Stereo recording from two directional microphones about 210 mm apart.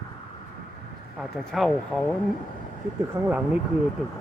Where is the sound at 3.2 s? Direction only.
15° right (ahead or behind).